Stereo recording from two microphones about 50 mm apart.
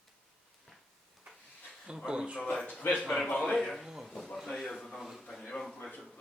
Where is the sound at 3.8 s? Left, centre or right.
Centre.